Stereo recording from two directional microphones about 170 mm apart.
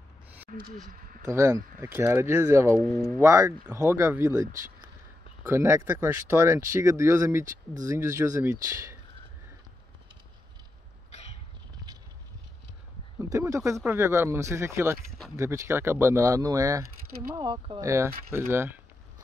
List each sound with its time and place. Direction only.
1.2 s speech: 15° right (ahead or behind)
13.2 s speech: 20° right (ahead or behind)
17.8 s speech: 15° right (ahead or behind)